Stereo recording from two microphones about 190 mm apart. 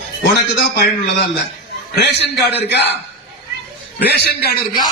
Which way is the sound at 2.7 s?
65° left (ahead or behind).